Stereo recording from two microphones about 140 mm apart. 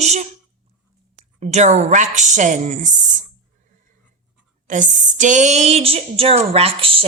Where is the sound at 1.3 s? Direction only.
55° right (ahead or behind).